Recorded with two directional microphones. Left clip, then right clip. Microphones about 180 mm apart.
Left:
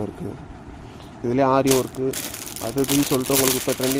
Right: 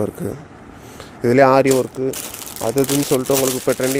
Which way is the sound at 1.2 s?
75° right (ahead or behind).